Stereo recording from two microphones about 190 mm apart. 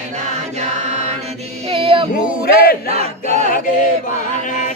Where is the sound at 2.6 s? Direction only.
50° left (ahead or behind).